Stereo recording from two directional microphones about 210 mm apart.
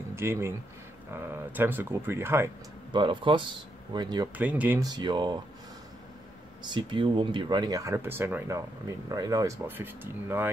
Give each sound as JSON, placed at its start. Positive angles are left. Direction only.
{"t": 0.1, "sound": "speech", "side_deg": -10}
{"t": 2.9, "sound": "speech", "side_deg": -25}
{"t": 4.4, "sound": "speech", "side_deg": -5}
{"t": 6.7, "sound": "speech", "side_deg": -25}